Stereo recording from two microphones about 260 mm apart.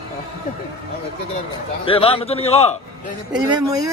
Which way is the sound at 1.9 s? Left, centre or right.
Left.